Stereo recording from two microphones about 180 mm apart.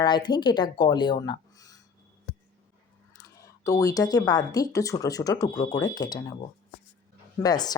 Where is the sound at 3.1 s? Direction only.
20° left (ahead or behind).